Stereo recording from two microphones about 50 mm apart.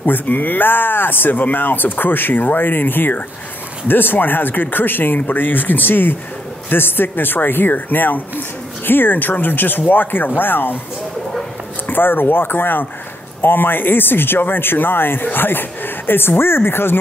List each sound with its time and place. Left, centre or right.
0.0 s speech: left
11.9 s speech: left